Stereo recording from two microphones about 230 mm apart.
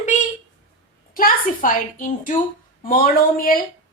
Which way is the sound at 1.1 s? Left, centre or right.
Left.